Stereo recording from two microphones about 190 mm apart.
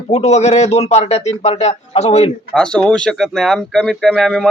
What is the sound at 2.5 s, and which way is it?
Speech, 5° left (ahead or behind).